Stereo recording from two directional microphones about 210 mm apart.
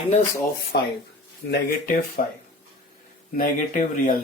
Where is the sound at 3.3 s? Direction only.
35° left (ahead or behind).